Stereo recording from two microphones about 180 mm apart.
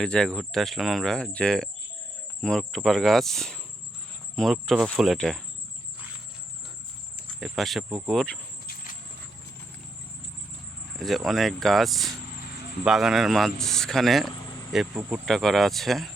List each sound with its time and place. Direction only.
0.0 s speech: 5° left (ahead or behind)
7.2 s insect: centre (ahead or behind)
8.6 s a sound: 50° left (ahead or behind)
10.9 s speech: centre (ahead or behind)